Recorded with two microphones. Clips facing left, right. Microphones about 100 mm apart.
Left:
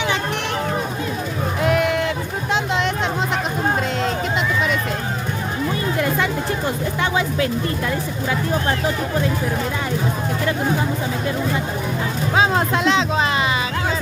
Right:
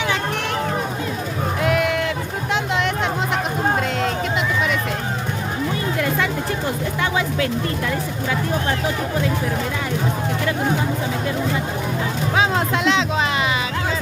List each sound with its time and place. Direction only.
1.6 s a sound: 30° left (ahead or behind)
7.0 s speech: 25° left (ahead or behind)
12.3 s speech: 30° left (ahead or behind)